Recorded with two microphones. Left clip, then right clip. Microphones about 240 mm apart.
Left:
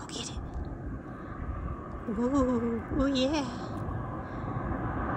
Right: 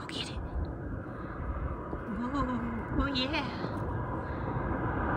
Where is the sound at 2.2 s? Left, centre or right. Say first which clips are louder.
Left 7 dB; centre.